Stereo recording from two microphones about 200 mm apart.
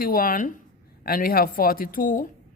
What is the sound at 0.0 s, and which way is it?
A woman's voice, 45° left (ahead or behind).